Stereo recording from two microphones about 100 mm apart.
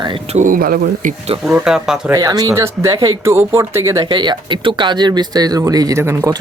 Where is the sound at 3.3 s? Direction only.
25° right (ahead or behind).